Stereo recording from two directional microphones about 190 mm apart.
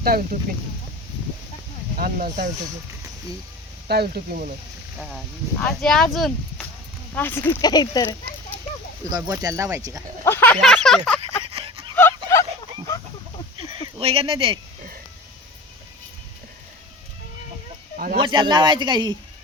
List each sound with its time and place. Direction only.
0.0 s speech: 50° right (ahead or behind)
2.0 s speech: 45° right (ahead or behind)
3.8 s speech: 55° right (ahead or behind)
4.9 s speech: centre (ahead or behind)
7.2 s speech: 10° left (ahead or behind)
9.0 s speech: 20° right (ahead or behind)
10.2 s speech: 10° left (ahead or behind)
11.2 s a sound: 30° right (ahead or behind)
11.9 s a sound: 15° left (ahead or behind)
13.7 s a sound: 25° right (ahead or behind)
17.9 s a sound: 50° right (ahead or behind)
18.2 s speech: 25° right (ahead or behind)